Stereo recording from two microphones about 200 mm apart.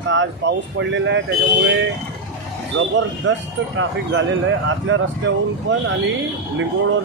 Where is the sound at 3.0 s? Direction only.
70° right (ahead or behind).